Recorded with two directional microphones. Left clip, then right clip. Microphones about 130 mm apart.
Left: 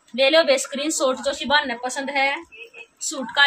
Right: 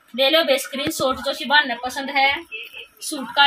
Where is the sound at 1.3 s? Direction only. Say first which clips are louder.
Right 2 dB; 25° left (ahead or behind).